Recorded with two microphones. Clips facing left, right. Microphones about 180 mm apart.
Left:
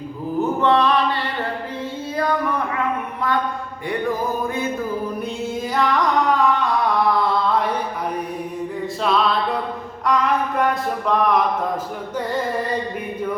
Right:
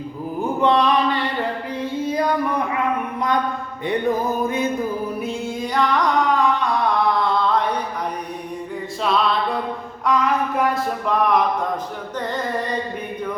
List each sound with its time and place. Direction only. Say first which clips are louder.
0.6 s music: right 1 dB; 15° right (ahead or behind)
1.8 s a sound: right 6 dB; 15° right (ahead or behind)
3.8 s music: right 2 dB; 20° right (ahead or behind)
5.7 s carnatic music: even; centre (ahead or behind)
7.2 s chant: even; 5° left (ahead or behind)
9.0 s music: even; centre (ahead or behind)
10.1 s a sound: even; centre (ahead or behind)